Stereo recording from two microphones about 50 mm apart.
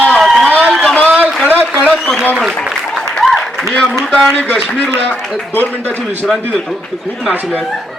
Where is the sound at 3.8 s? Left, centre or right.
Centre.